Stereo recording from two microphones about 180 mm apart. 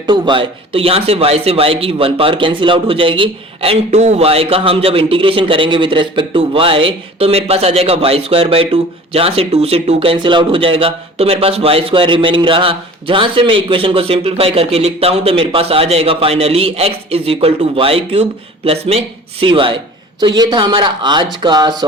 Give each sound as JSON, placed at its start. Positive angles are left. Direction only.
{"t": 0.0, "sound": "speech", "side_deg": -25}